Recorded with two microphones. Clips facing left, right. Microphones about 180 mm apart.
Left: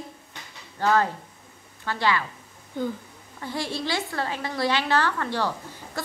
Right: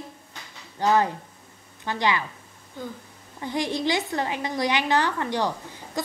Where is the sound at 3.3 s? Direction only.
15° right (ahead or behind).